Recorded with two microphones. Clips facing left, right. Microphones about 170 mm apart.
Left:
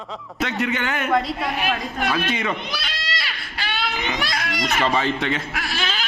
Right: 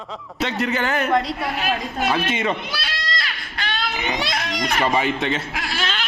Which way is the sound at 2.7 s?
5° right (ahead or behind).